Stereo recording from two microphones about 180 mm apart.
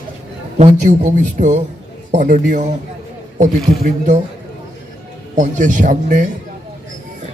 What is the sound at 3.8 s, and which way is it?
Speech, 45° right (ahead or behind).